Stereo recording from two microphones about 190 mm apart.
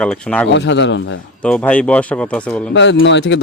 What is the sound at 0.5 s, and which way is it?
Speech, 70° left (ahead or behind).